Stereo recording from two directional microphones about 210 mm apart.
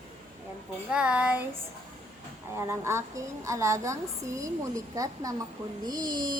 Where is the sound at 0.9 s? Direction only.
5° right (ahead or behind).